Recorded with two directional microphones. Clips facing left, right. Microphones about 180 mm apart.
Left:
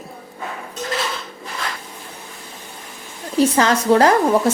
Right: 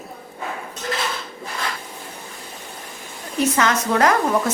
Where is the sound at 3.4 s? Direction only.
30° left (ahead or behind).